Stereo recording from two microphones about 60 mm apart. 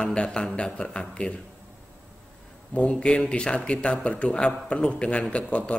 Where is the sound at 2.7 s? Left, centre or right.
Centre.